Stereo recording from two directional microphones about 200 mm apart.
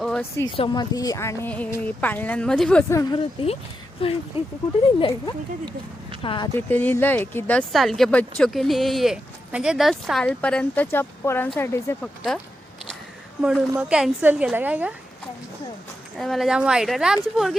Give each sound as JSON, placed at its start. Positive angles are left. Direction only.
{"t": 0.2, "sound": "speech", "side_deg": 15}
{"t": 3.4, "sound": "speech", "side_deg": 30}
{"t": 6.6, "sound": "speech", "side_deg": 10}
{"t": 13.4, "sound": "speech", "side_deg": -5}
{"t": 16.1, "sound": "speech", "side_deg": 0}